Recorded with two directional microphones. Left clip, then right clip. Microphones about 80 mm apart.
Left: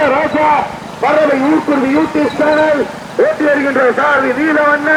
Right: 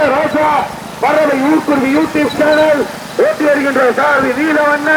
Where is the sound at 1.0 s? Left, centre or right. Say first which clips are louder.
Even; centre.